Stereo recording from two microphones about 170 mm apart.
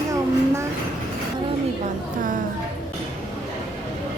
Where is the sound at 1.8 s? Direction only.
50° right (ahead or behind).